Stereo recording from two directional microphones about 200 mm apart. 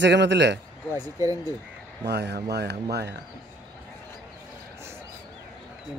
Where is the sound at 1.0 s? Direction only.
15° right (ahead or behind).